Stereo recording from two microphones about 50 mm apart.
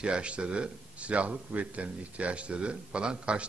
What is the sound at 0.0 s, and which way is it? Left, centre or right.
A man's voice, right.